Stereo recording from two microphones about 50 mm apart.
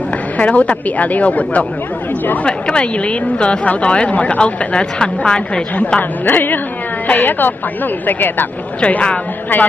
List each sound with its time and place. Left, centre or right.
0.4 s a woman's voice: left
5.9 s speech: left
8.8 s a woman's voice: left
9.5 s speech: left